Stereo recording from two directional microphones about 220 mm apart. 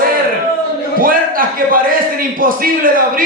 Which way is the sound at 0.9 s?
40° right (ahead or behind).